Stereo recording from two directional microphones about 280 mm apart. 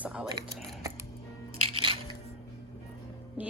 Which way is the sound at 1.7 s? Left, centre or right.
Centre.